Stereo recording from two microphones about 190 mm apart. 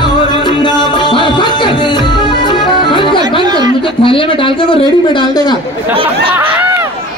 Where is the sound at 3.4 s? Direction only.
20° right (ahead or behind).